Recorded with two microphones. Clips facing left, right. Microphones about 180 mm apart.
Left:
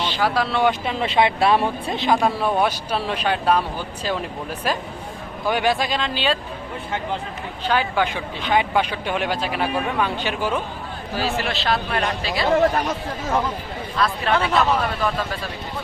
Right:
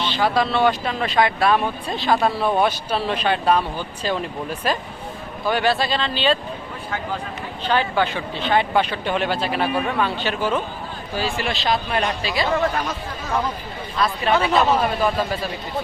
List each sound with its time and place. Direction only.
0.0 s vehicle: 10° left (ahead or behind)
0.3 s speech: 10° left (ahead or behind)
2.2 s speech: 10° left (ahead or behind)
5.5 s speech: 15° left (ahead or behind)
7.6 s speech: 10° left (ahead or behind)
11.3 s speech: centre (ahead or behind)
13.9 s speech: 5° right (ahead or behind)
14.5 s a man's voice: 20° right (ahead or behind)